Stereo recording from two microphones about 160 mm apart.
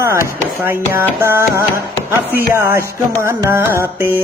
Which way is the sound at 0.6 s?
15° right (ahead or behind).